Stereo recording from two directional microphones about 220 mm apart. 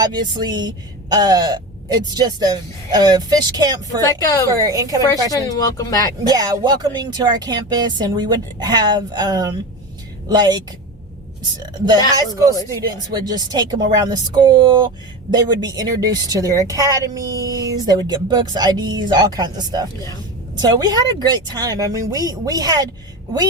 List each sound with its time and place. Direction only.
0.0 s speech: 20° right (ahead or behind)
4.0 s speech: 15° left (ahead or behind)
4.4 s speech: 15° right (ahead or behind)
5.3 s speech: 15° left (ahead or behind)
6.2 s speech: 15° right (ahead or behind)
13.4 s speech: 20° right (ahead or behind)